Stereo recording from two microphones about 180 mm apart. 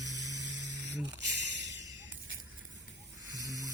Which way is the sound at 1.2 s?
80° right.